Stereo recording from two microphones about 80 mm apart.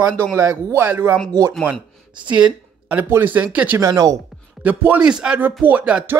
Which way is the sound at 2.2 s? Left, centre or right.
Centre.